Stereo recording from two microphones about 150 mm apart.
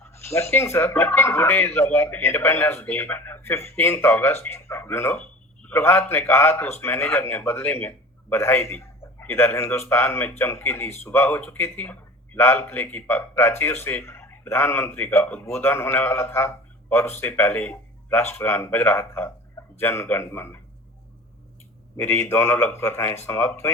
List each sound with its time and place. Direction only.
0.0 s speech: 15° left (ahead or behind)
21.9 s speech: 15° left (ahead or behind)